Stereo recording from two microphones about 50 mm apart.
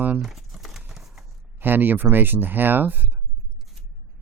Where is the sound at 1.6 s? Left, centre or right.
Right.